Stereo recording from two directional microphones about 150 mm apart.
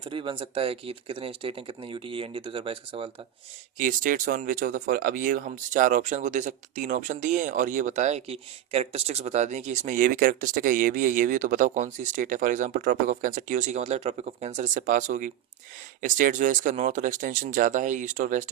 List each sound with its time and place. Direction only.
0.0 s speech: 35° right (ahead or behind)
3.8 s speech: 65° right (ahead or behind)